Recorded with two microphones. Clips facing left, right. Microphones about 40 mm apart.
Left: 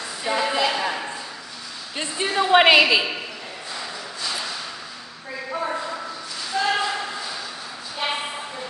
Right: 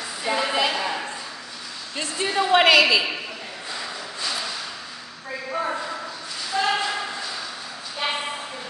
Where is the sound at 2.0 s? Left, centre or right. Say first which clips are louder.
Left 1 dB; centre.